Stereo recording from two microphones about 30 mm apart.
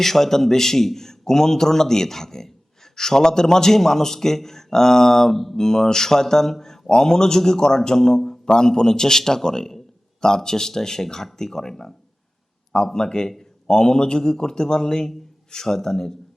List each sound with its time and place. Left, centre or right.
0.0 s a man's voice: centre
12.7 s speech: centre